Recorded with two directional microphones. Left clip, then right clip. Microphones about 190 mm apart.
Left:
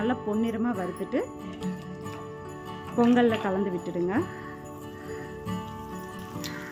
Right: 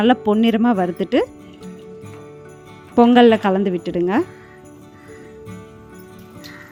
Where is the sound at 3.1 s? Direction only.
45° right (ahead or behind).